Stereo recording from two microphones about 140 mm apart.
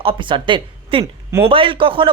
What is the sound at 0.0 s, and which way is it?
A woman's voice, 40° right (ahead or behind).